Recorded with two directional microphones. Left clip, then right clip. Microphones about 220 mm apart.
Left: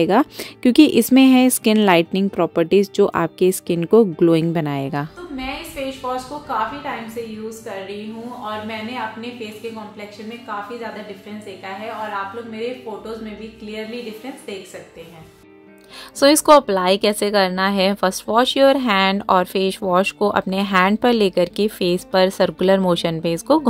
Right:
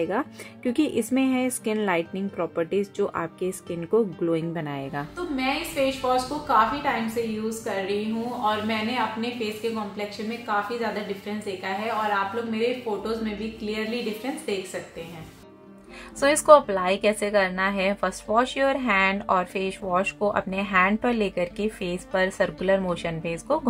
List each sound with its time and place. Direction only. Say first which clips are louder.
0.0 s speech: left 10 dB; 50° left (ahead or behind)
5.3 s a woman's voice: right 4 dB; 5° right (ahead or behind)
8.5 s a woman's voice: right 2 dB; 5° right (ahead or behind)
10.5 s a woman's voice: right 2 dB; 5° right (ahead or behind)
13.7 s a woman's voice: even; 5° right (ahead or behind)
16.2 s speech: left 4 dB; 35° left (ahead or behind)